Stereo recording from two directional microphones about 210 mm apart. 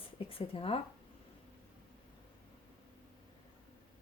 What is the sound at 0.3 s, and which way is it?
Speech, 25° left (ahead or behind).